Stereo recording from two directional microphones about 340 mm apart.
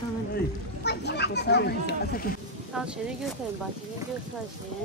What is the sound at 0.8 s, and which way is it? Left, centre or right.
Speech, left.